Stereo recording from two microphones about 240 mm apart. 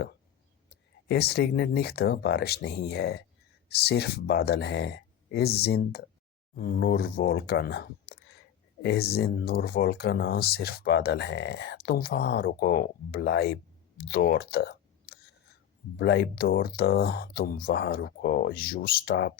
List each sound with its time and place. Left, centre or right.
0.7 s speech: left